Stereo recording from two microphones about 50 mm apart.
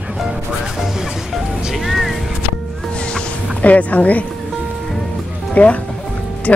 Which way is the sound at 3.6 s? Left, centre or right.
Left.